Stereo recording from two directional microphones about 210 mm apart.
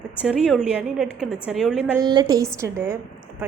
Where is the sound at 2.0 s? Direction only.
20° right (ahead or behind).